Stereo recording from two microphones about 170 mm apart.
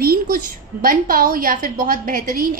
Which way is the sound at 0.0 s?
60° right (ahead or behind).